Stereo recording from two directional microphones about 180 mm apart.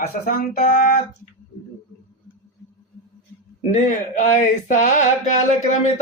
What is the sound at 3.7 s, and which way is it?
A man's voice, 45° left (ahead or behind).